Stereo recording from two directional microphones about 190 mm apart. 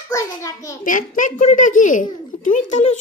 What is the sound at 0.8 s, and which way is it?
A child's voice, 45° left (ahead or behind).